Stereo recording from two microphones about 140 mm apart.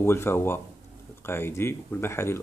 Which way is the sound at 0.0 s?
15° left (ahead or behind).